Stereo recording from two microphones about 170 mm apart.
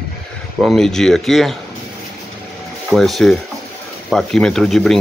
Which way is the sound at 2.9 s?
Centre (ahead or behind).